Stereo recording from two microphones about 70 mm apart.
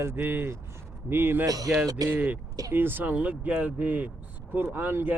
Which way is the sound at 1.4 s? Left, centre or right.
Right.